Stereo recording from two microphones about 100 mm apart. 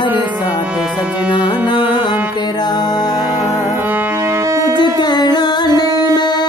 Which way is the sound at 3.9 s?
20° right (ahead or behind).